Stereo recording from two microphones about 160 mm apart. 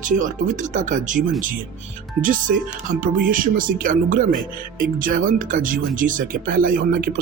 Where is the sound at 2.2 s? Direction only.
55° right (ahead or behind).